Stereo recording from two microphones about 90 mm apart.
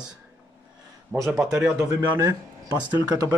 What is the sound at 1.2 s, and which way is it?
Speech, 5° right (ahead or behind).